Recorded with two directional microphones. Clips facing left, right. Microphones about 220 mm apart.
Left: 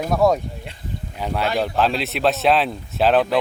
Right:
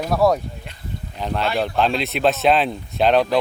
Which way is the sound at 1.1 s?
10° left (ahead or behind).